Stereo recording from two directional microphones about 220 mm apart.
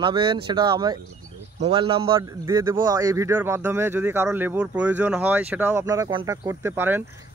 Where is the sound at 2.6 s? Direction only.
10° right (ahead or behind).